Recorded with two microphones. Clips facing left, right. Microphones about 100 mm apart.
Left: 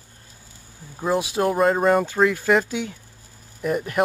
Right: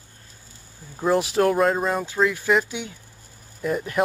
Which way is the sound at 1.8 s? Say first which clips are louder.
Left 6 dB; 55° left (ahead or behind).